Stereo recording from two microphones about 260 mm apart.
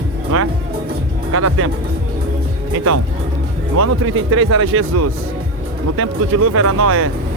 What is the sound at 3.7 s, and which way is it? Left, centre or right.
Speech, right.